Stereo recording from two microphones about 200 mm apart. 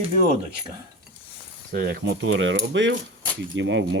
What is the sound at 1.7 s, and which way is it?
Speech, 50° right (ahead or behind).